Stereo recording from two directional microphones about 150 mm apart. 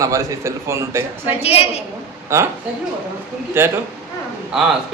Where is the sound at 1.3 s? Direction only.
40° left (ahead or behind).